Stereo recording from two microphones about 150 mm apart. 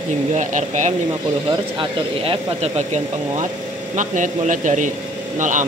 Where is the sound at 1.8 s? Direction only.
35° right (ahead or behind).